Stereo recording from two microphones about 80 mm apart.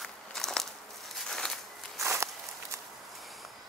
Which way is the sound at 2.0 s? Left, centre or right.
Right.